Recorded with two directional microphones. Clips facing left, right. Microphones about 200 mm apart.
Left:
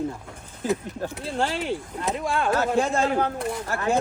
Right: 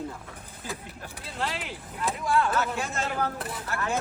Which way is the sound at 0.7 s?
25° left (ahead or behind).